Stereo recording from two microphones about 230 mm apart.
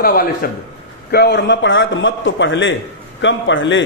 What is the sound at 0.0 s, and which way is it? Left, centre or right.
A man's voice, left.